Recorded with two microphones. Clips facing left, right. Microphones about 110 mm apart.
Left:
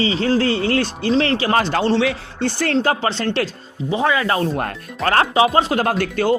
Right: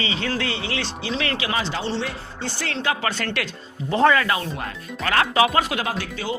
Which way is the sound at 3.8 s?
15° left (ahead or behind).